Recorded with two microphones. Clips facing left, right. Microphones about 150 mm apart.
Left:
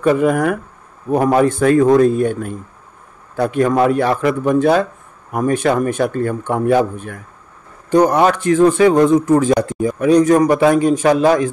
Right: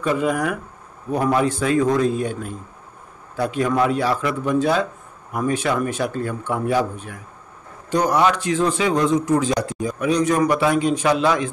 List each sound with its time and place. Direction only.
0.0 s speech: 50° left (ahead or behind)